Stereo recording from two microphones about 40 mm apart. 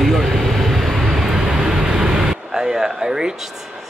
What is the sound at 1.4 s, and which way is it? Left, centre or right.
Air conditioning, centre.